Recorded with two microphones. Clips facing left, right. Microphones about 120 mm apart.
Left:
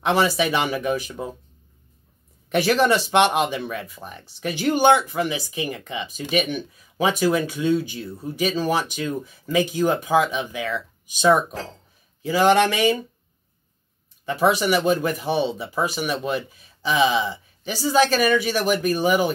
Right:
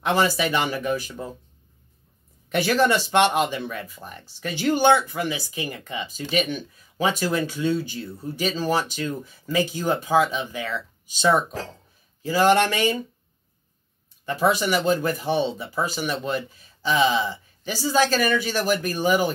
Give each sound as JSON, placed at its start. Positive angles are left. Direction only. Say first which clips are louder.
{"t": 0.1, "sound": "speech", "louder": "left 1 dB", "side_deg": 15}
{"t": 2.5, "sound": "speech", "louder": "left 2 dB", "side_deg": 20}
{"t": 14.3, "sound": "speech", "louder": "left 2 dB", "side_deg": 20}